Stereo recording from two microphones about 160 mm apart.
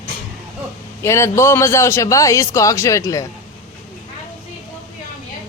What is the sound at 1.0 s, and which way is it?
A man's voice, 15° left (ahead or behind).